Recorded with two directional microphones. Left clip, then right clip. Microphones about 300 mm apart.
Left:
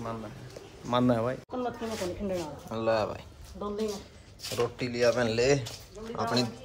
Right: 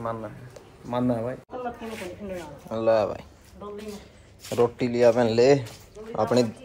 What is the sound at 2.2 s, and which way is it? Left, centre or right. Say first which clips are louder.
Speech: left 3 dB; left.